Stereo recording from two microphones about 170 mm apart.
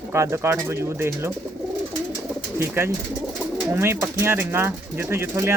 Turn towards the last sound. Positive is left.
turn(degrees=-15)  # may be behind; listen again after turning